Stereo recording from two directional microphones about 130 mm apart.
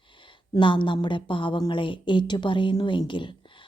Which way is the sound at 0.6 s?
40° left (ahead or behind).